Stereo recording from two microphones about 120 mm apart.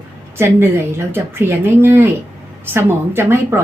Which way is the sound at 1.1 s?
20° right (ahead or behind).